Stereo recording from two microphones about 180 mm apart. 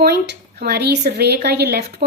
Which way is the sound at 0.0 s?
60° right (ahead or behind).